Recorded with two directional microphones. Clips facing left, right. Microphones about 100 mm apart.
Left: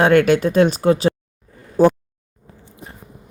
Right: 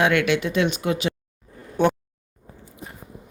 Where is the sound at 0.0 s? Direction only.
40° left (ahead or behind).